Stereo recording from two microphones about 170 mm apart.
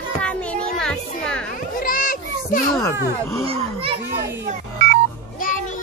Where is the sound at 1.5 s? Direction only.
55° left (ahead or behind).